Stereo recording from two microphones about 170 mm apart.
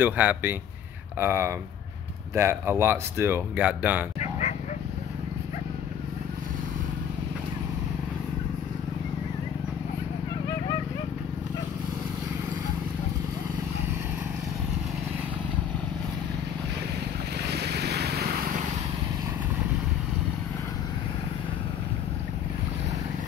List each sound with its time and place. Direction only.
0.0 s speech: 10° right (ahead or behind)
4.2 s a sound: 40° left (ahead or behind)
17.5 s vehicle: 75° right (ahead or behind)